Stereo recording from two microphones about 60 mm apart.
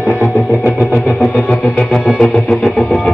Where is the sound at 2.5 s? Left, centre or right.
Centre.